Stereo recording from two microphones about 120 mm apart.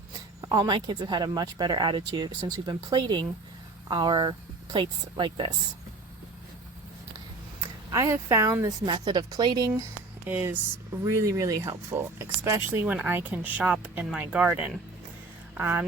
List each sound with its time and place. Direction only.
0.4 s speech: 35° right (ahead or behind)
7.6 s speech: 30° right (ahead or behind)
8.9 s speech: 35° right (ahead or behind)
10.2 s speech: 15° right (ahead or behind)
11.0 s speech: 25° right (ahead or behind)